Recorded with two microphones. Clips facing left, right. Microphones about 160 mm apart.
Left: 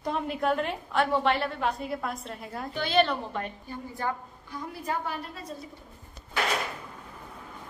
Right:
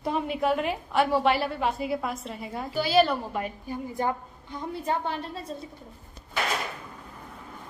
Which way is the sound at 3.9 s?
20° right (ahead or behind).